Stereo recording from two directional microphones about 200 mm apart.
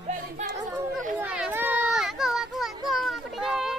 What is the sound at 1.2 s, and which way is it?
Children playing, 5° right (ahead or behind).